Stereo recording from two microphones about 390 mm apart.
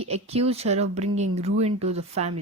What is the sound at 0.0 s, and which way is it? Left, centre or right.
Speech, centre.